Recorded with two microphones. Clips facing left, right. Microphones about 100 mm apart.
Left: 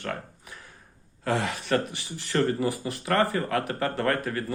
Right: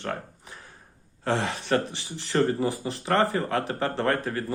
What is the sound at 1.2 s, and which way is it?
Speech, 30° right (ahead or behind).